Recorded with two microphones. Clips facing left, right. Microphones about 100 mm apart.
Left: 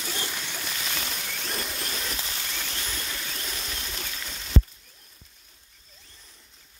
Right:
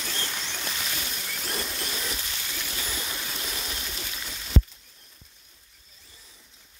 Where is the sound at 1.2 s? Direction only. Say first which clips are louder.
Even; centre (ahead or behind).